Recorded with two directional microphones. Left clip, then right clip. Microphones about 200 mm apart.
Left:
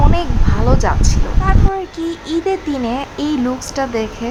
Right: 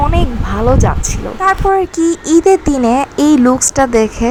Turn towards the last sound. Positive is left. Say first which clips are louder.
# right 8 dB
turn(degrees=-25)  # may be behind; listen again after turning